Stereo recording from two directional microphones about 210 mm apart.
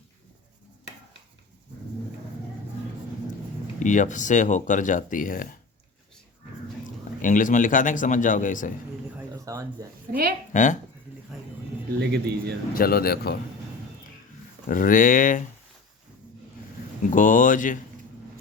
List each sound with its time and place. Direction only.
3.8 s speech: 35° left (ahead or behind)
7.2 s speech: 40° left (ahead or behind)
9.1 s a sound: 15° right (ahead or behind)
10.5 s speech: 35° left (ahead or behind)
11.9 s a man's voice: 50° right (ahead or behind)
12.7 s speech: 45° left (ahead or behind)
14.7 s speech: 40° left (ahead or behind)
17.0 s speech: 40° left (ahead or behind)